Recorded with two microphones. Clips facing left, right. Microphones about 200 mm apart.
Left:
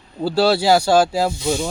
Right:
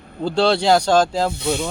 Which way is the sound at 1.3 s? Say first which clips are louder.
Left 1 dB; 60° right (ahead or behind).